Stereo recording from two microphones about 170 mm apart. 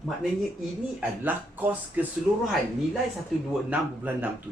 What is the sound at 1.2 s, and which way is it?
Speech, 10° right (ahead or behind).